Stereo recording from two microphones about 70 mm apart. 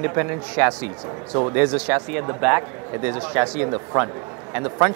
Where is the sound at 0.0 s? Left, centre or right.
Right.